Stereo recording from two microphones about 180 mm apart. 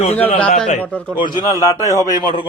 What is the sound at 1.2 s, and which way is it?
Speech, 25° left (ahead or behind).